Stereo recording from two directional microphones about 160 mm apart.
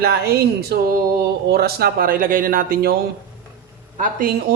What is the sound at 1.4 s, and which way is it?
A man's voice, 80° right.